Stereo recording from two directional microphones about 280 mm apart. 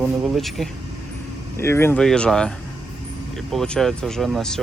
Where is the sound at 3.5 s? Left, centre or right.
Centre.